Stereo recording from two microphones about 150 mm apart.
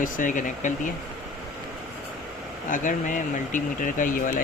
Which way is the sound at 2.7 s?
60° left (ahead or behind).